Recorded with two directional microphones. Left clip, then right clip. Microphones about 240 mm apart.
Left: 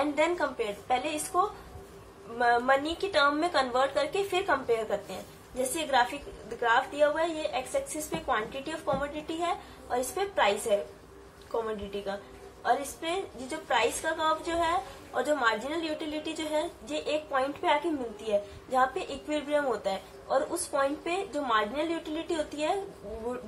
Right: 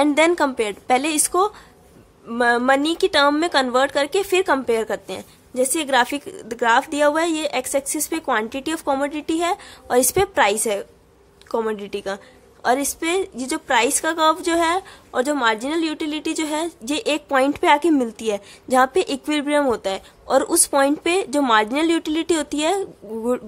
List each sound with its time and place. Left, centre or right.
0.0 s a woman's voice: right